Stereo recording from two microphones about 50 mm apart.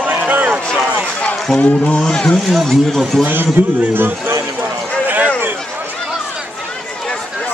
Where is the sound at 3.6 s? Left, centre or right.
Right.